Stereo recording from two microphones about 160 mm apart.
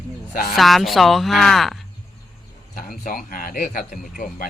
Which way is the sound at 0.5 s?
Centre (ahead or behind).